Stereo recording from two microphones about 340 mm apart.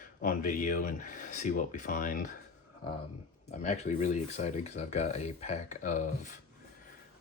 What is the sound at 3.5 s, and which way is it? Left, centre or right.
Speech, centre.